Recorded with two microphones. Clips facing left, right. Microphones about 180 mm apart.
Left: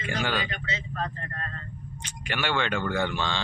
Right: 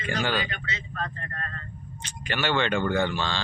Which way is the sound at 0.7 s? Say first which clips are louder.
Left 2 dB; 25° left (ahead or behind).